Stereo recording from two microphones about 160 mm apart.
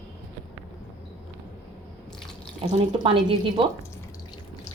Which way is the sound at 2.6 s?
30° right (ahead or behind).